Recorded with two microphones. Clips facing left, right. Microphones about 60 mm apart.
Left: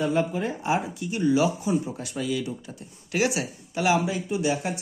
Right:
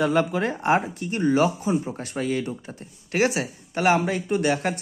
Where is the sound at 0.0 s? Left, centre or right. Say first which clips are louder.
Right 3 dB; right.